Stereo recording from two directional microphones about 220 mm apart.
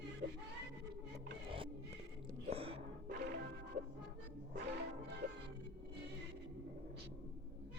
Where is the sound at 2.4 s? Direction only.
25° right (ahead or behind).